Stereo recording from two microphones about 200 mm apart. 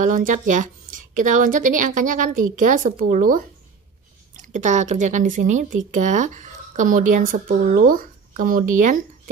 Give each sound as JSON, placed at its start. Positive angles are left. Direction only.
{"t": 0.0, "sound": "speech", "side_deg": -40}